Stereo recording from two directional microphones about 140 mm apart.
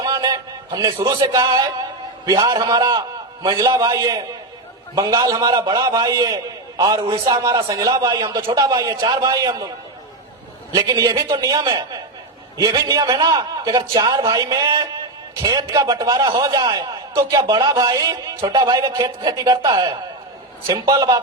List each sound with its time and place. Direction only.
0.0 s a sound: 25° right (ahead or behind)
2.2 s a man's voice: 25° right (ahead or behind)
10.7 s a man's voice: 25° right (ahead or behind)